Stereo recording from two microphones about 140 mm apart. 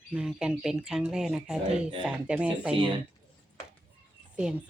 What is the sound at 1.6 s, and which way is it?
Speech, 35° right (ahead or behind).